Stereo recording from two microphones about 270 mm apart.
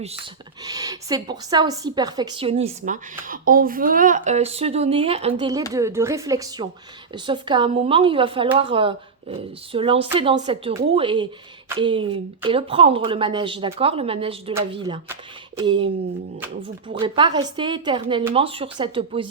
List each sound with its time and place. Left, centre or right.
0.6 s a woman's voice: centre
16.9 s a woman's voice: centre